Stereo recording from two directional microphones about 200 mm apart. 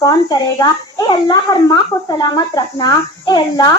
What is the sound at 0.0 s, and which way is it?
A child's voice, 20° left (ahead or behind).